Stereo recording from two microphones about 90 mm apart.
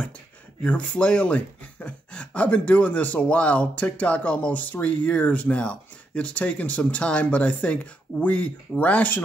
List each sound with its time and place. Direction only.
0.7 s speech: 15° left (ahead or behind)